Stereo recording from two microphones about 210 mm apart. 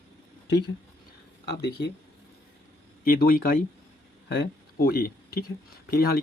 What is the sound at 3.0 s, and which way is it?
Speech, 45° left (ahead or behind).